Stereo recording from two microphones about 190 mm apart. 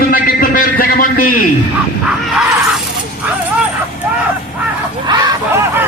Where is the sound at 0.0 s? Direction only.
50° left (ahead or behind).